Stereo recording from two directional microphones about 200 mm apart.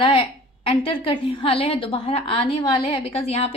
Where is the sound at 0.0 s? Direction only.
25° left (ahead or behind).